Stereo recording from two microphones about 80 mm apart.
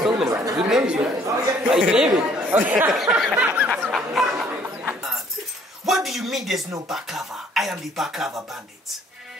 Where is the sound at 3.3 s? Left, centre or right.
Centre.